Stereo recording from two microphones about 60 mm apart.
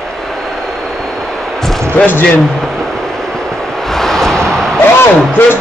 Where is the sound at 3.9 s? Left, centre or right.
Centre.